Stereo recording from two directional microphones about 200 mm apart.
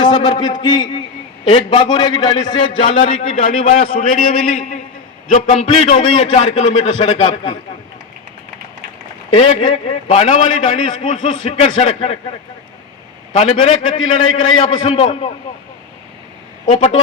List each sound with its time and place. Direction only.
0.0 s a man's voice: 25° left (ahead or behind)
5.3 s a man's voice: 35° left (ahead or behind)
9.3 s a man's voice: 30° left (ahead or behind)
13.3 s a man's voice: 30° left (ahead or behind)
16.6 s a man's voice: 35° left (ahead or behind)